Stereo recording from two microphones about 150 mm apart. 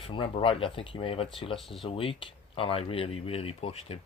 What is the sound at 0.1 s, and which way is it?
Speech, 35° left (ahead or behind).